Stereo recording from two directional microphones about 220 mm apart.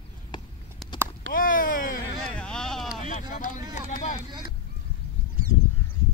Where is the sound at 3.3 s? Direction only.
35° left (ahead or behind).